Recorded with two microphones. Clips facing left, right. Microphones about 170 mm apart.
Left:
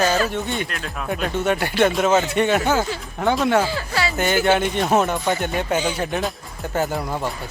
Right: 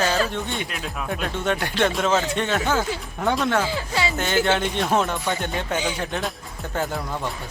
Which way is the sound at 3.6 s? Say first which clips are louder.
Left 1 dB; 20° right (ahead or behind).